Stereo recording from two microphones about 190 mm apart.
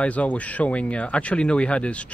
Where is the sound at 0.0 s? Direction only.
5° left (ahead or behind).